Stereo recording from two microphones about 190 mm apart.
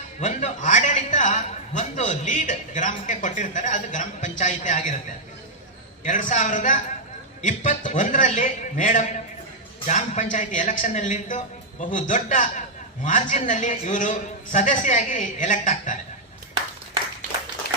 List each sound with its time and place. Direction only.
0.2 s a man's voice: 40° left (ahead or behind)
6.1 s a man's voice: 40° left (ahead or behind)